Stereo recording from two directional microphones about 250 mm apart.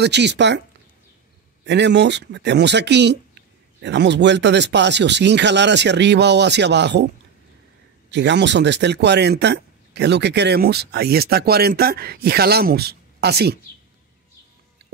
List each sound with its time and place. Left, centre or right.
0.0 s speech: right
1.6 s speech: right
8.1 s speech: right